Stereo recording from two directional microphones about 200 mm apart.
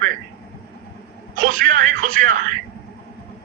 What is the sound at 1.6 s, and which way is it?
Speech, 40° right (ahead or behind).